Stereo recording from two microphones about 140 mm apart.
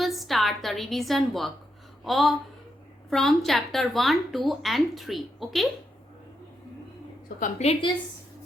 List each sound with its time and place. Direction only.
0.0 s a woman's voice: centre (ahead or behind)
7.3 s a woman's voice: 65° left (ahead or behind)